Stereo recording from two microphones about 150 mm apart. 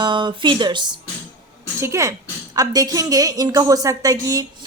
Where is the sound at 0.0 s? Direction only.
30° right (ahead or behind).